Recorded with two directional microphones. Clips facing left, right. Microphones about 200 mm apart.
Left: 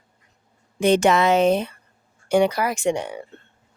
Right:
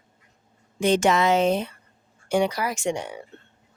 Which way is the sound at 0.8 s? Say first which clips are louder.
Left 3 dB; 65° left (ahead or behind).